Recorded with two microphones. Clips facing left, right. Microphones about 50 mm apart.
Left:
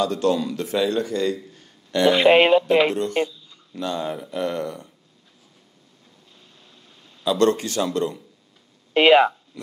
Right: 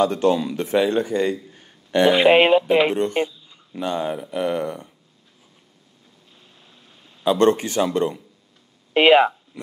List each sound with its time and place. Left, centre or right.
0.0 s a man's voice: right
2.1 s speech: centre
7.2 s speech: right
8.9 s speech: centre